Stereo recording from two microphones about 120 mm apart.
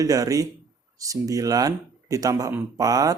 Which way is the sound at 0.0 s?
30° right (ahead or behind).